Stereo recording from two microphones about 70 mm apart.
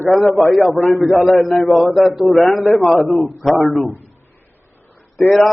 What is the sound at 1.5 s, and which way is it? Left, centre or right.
A man's voice, centre.